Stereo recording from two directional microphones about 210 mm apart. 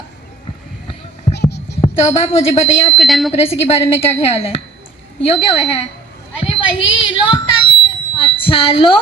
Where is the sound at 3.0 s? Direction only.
Centre (ahead or behind).